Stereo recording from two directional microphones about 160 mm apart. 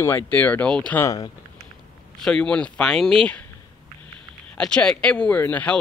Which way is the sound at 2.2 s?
5° left (ahead or behind).